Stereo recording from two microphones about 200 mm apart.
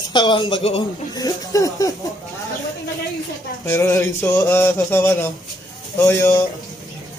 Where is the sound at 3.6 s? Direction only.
15° left (ahead or behind).